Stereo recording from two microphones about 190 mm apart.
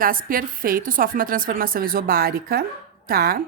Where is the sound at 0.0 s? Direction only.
45° right (ahead or behind).